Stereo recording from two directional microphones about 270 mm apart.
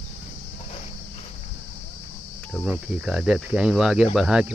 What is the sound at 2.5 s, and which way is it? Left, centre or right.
Speech, centre.